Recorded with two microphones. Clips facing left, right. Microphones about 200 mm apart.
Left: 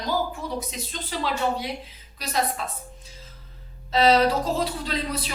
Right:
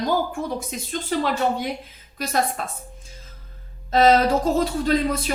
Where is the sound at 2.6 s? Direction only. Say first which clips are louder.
Right 2 dB; 50° right (ahead or behind).